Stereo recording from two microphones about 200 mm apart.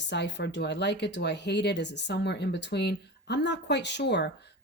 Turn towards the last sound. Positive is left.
turn(degrees=60)  # may be behind; listen again after turning